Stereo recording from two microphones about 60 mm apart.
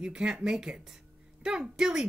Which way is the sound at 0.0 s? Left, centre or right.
Centre.